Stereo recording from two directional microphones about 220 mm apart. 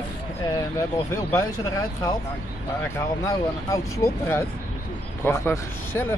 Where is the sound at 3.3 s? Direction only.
15° left (ahead or behind).